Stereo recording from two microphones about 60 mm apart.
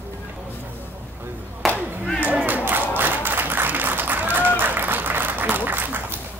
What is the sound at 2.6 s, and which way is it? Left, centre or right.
Applause, right.